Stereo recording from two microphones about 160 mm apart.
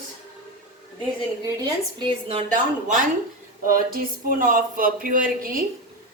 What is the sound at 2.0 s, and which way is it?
Speech, 35° right (ahead or behind).